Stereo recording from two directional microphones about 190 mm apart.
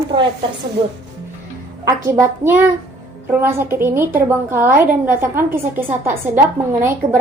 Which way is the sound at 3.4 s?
10° right (ahead or behind).